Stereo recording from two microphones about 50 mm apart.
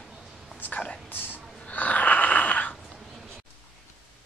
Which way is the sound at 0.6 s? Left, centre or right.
Left.